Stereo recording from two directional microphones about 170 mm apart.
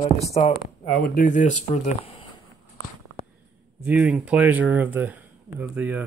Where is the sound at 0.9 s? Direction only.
60° left (ahead or behind); by 2.2 s 40° left (ahead or behind).